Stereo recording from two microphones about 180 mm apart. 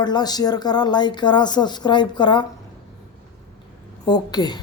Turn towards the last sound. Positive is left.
turn(degrees=20)  # may be behind; listen again after turning